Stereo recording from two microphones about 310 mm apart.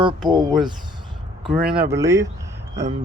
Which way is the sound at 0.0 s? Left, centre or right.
Centre.